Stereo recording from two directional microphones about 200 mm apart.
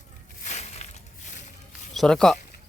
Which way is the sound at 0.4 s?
35° left (ahead or behind).